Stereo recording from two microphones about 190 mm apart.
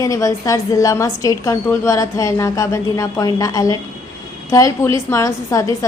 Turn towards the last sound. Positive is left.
turn(degrees=15)  # may be behind; listen again after turning